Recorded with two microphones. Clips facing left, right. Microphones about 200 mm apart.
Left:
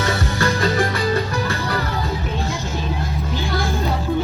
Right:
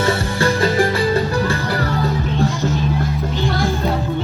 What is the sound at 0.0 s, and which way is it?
Music, 30° right (ahead or behind).